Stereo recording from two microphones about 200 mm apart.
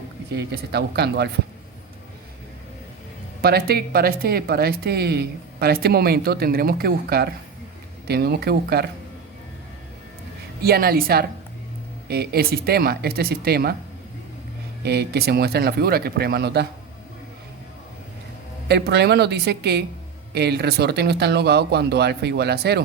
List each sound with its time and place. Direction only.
0.3 s speech: 55° right (ahead or behind)
3.4 s speech: 50° right (ahead or behind)
10.6 s speech: 50° right (ahead or behind)
14.8 s speech: 55° right (ahead or behind)
18.7 s speech: 55° right (ahead or behind)